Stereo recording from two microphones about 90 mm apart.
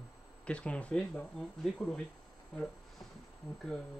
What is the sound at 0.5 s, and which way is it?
Speech, 15° left (ahead or behind).